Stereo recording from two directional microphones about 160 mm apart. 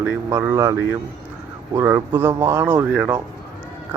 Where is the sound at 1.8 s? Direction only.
15° right (ahead or behind).